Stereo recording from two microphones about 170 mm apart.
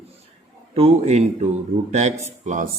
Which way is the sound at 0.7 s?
40° right (ahead or behind).